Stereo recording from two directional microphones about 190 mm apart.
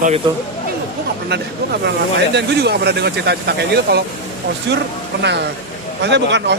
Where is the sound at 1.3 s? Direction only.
60° right (ahead or behind).